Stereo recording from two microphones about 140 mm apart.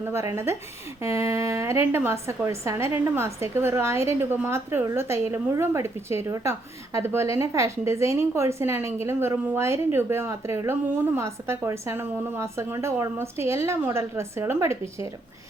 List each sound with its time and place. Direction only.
0.0 s a woman's voice: 20° right (ahead or behind)